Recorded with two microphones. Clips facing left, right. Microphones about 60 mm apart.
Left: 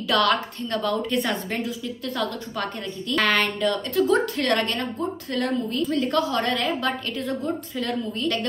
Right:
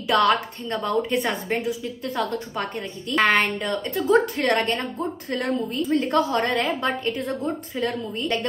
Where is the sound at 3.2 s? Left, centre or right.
Centre.